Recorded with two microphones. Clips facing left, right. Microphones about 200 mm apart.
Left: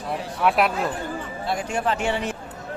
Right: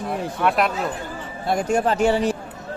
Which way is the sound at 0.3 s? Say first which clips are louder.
Left 1 dB; 5° left (ahead or behind).